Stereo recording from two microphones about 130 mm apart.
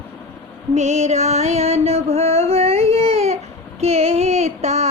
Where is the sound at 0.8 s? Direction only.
60° right (ahead or behind).